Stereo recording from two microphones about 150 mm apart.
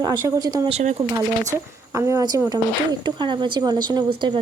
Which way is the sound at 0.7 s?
50° right (ahead or behind).